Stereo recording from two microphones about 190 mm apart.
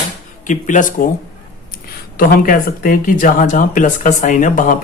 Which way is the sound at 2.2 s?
50° left (ahead or behind).